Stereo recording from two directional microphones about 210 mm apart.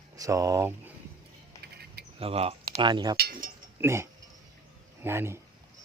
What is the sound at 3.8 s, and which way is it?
Speech, 10° right (ahead or behind).